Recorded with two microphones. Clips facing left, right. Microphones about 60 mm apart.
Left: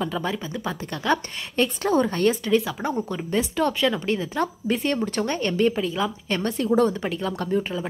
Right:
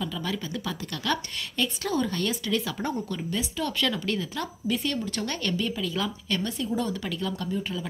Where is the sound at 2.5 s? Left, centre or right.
Centre; by 5.9 s left.